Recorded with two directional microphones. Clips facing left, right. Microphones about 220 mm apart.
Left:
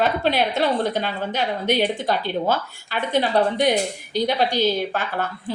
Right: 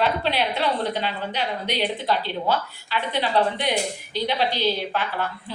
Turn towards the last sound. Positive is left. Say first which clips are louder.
# left 2 dB
turn(degrees=45)  # may be behind; listen again after turning